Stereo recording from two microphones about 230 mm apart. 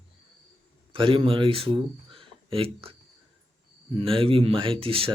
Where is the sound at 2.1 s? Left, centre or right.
Right.